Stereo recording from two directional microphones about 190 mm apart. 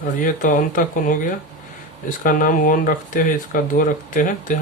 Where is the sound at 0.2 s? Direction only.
45° left (ahead or behind).